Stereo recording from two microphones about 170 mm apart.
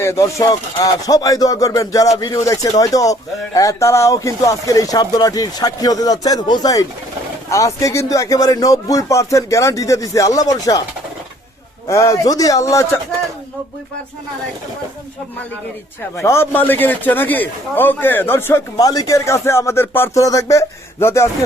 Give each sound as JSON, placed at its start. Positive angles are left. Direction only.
{"t": 0.0, "sound": "speech", "side_deg": 15}
{"t": 11.9, "sound": "speech", "side_deg": 15}
{"t": 16.1, "sound": "a man's voice", "side_deg": 15}